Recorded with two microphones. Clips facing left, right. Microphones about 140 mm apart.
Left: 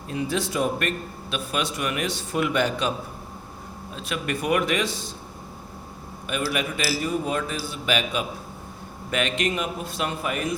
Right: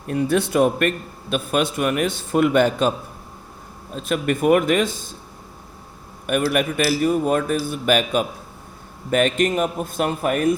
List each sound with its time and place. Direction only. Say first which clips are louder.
0.1 s a man's voice: right 7 dB; 55° right (ahead or behind)
3.9 s a man's voice: right 7 dB; 45° right (ahead or behind)
6.2 s a man's voice: right 7 dB; 55° right (ahead or behind)